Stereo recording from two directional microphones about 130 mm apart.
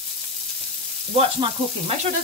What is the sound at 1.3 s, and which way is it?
Sizzle, 40° right (ahead or behind).